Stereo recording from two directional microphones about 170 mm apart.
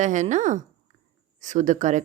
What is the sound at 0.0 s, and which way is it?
A woman's voice, 45° right (ahead or behind).